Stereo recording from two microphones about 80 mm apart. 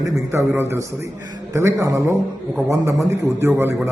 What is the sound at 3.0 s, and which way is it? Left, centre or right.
Speech, right.